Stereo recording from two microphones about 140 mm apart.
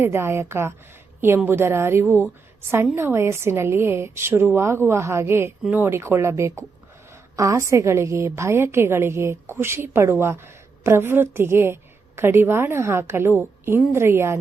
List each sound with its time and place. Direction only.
0.0 s a woman's voice: 15° right (ahead or behind)